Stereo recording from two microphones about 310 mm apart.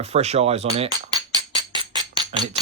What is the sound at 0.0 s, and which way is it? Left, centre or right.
Music, right.